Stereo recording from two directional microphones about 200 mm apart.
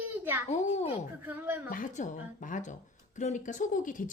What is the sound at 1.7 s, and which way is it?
Speech, 40° left (ahead or behind).